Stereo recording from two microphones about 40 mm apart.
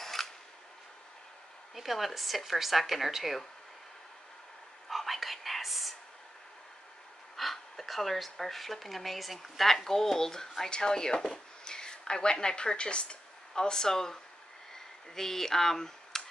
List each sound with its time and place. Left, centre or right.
0.0 s camera: centre
1.8 s speech: centre
4.8 s whispering: centre
7.3 s speech: centre